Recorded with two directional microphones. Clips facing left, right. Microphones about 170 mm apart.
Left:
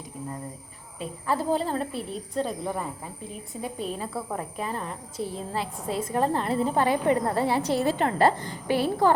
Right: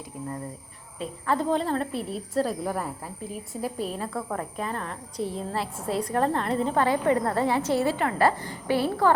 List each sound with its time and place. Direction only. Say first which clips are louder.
0.9 s a woman's voice: right 1 dB; 5° left (ahead or behind)
6.7 s a woman's voice: right 1 dB; 20° left (ahead or behind)